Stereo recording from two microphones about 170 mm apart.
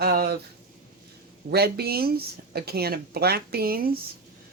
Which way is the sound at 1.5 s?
70° right (ahead or behind).